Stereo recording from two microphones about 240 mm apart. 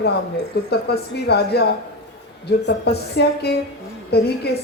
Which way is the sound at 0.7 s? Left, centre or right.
Left.